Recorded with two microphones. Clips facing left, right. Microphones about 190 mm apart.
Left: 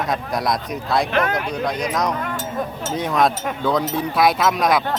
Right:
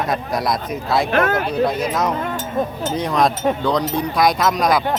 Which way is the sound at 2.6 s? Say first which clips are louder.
Right 6 dB; 25° right (ahead or behind).